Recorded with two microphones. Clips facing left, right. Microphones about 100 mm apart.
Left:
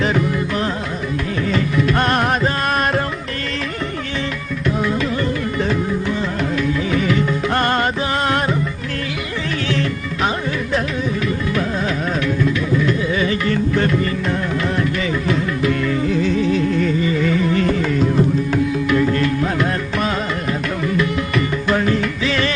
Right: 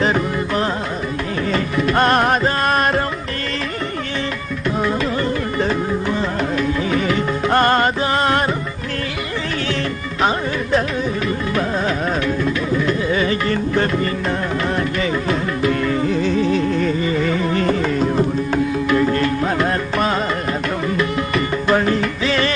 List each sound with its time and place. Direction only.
0.0 s music: 35° right (ahead or behind)
5.5 s music: 35° right (ahead or behind)
10.2 s music: 35° right (ahead or behind)
12.4 s music: 40° right (ahead or behind)
15.3 s music: 35° right (ahead or behind)